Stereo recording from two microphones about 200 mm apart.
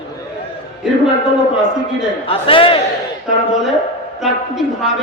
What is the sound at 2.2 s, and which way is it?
Speech, 25° left (ahead or behind).